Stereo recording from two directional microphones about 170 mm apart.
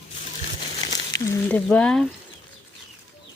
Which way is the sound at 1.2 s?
10° left (ahead or behind).